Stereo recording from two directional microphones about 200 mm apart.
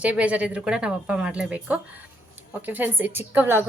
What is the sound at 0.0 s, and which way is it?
A woman's voice, 5° right (ahead or behind).